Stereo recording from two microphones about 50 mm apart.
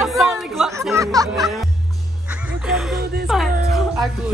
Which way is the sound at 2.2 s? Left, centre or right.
Right.